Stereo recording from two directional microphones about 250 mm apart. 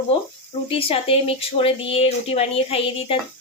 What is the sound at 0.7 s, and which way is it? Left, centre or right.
Speech, left.